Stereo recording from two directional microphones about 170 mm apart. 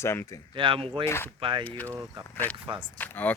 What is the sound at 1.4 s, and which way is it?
Speech, 30° right (ahead or behind).